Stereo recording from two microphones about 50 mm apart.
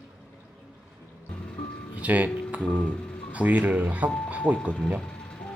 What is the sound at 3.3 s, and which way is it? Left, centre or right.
Speech, right.